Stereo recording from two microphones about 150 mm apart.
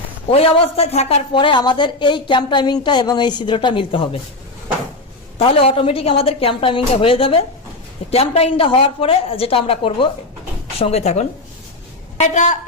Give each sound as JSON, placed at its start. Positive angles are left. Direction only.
{"t": 0.3, "sound": "speech", "side_deg": 40}
{"t": 1.3, "sound": "a woman's voice", "side_deg": 30}
{"t": 5.4, "sound": "a woman's voice", "side_deg": 35}